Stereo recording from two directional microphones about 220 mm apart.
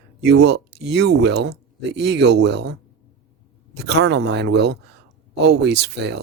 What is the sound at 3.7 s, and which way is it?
Speech, 50° right (ahead or behind).